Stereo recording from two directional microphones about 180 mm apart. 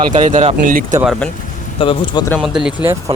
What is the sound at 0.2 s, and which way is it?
Speech, 45° right (ahead or behind).